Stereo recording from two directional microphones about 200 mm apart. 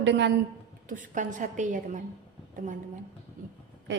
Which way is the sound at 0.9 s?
40° right (ahead or behind).